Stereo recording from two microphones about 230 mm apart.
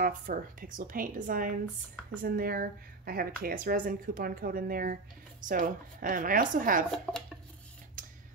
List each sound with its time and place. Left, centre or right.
0.0 s speech: right